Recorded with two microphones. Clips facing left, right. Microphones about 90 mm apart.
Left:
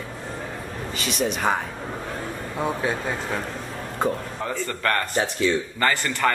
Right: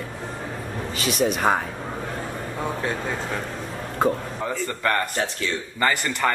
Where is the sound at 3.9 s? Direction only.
5° right (ahead or behind).